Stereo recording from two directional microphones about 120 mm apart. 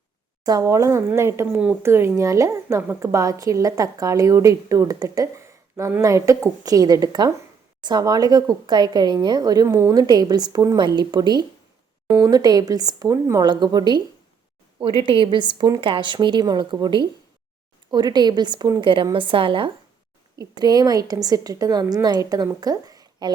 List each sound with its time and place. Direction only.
0.4 s a woman's voice: 30° right (ahead or behind)
10.8 s a woman's voice: 40° right (ahead or behind)
20.4 s speech: 35° right (ahead or behind)
22.6 s a sound: 30° right (ahead or behind)